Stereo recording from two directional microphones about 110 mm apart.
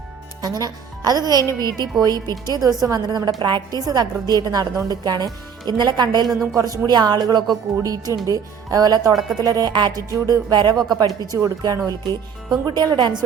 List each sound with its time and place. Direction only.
0.4 s a woman's voice: 35° right (ahead or behind)
6.2 s a woman's voice: centre (ahead or behind)
6.6 s a woman's voice: 35° right (ahead or behind)